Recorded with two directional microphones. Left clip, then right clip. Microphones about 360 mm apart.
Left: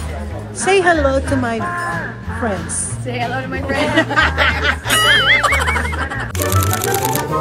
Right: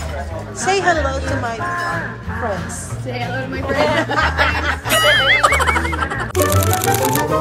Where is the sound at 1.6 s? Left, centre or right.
Centre.